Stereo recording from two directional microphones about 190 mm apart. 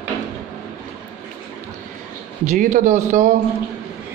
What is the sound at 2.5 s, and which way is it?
Speech, 45° right (ahead or behind).